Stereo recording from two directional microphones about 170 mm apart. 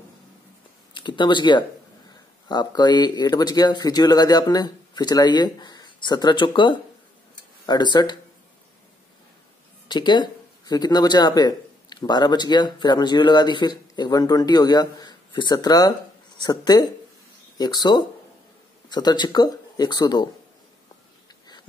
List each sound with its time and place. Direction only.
0.9 s speech: 25° left (ahead or behind)
9.8 s speech: 25° left (ahead or behind)